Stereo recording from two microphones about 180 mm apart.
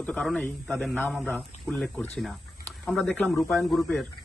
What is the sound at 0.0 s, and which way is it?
A man's voice, 5° left (ahead or behind).